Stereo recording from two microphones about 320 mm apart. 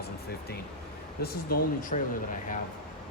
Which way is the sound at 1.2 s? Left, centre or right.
Left.